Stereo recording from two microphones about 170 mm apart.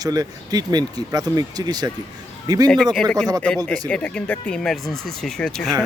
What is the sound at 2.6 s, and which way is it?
Speech, centre (ahead or behind).